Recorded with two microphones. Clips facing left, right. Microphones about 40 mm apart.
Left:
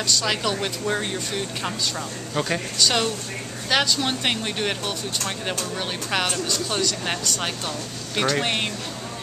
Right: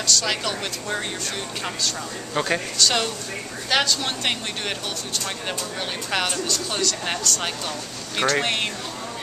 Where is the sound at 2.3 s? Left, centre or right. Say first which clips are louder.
Right 2 dB; centre.